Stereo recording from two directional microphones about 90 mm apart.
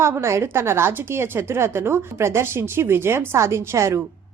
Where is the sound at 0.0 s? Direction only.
30° right (ahead or behind).